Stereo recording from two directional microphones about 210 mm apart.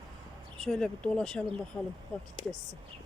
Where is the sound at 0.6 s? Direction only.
Centre (ahead or behind).